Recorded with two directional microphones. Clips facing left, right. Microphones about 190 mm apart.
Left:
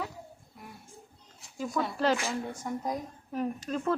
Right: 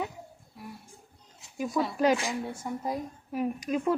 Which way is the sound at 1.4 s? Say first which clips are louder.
Right 3 dB; 20° right (ahead or behind).